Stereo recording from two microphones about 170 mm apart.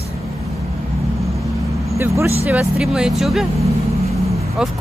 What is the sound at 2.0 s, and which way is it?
Speech, 15° right (ahead or behind).